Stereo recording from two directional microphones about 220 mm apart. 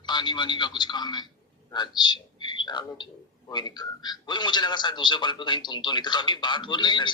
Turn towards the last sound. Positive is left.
turn(degrees=20)  # may be behind; listen again after turning